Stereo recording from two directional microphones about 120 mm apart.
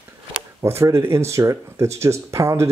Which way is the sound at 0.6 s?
25° right (ahead or behind).